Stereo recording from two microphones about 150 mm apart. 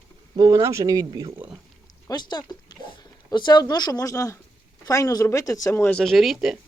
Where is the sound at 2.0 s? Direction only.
30° left (ahead or behind); by 6.6 s centre (ahead or behind).